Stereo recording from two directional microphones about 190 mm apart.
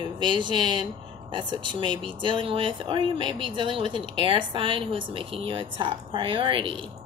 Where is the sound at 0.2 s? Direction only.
25° right (ahead or behind).